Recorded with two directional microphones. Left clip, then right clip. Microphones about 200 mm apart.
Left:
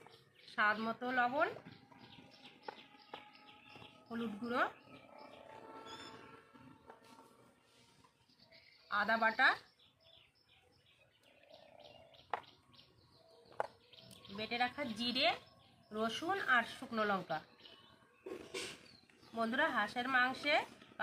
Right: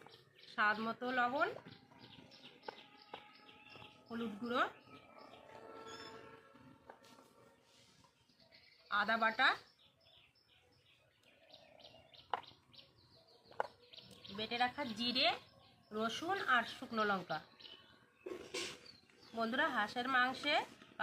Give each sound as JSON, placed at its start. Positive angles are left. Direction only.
{"t": 0.5, "sound": "speech", "side_deg": 5}
{"t": 4.1, "sound": "speech", "side_deg": 5}
{"t": 5.8, "sound": "music", "side_deg": 50}
{"t": 8.9, "sound": "speech", "side_deg": 5}
{"t": 14.3, "sound": "speech", "side_deg": 10}
{"t": 19.4, "sound": "speech", "side_deg": 5}